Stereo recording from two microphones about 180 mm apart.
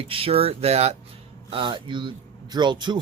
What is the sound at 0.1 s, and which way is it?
Speech, 30° right (ahead or behind).